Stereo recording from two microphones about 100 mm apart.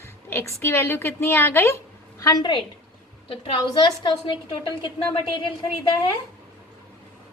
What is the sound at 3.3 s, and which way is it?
Speech, 65° left (ahead or behind).